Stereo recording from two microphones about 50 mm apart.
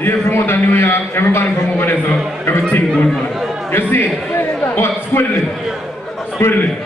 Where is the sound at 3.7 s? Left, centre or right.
Left.